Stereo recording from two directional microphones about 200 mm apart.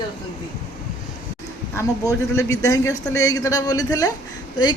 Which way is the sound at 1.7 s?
15° left (ahead or behind).